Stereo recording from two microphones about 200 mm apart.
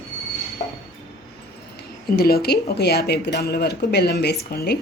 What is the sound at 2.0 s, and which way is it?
Speech, 50° left (ahead or behind).